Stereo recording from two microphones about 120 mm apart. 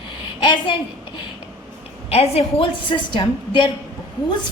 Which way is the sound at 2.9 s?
40° left (ahead or behind).